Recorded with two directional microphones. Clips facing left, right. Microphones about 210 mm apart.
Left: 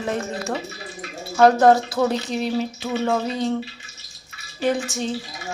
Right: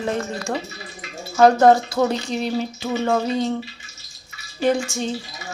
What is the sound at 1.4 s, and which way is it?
Speech, centre (ahead or behind).